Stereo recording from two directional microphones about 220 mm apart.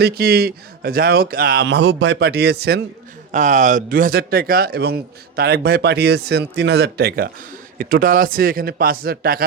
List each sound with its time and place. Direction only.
0.0 s speech: 45° right (ahead or behind)
3.3 s a man's voice: 35° right (ahead or behind)